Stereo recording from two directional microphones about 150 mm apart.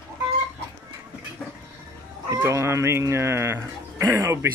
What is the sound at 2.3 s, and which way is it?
Speech, 20° right (ahead or behind).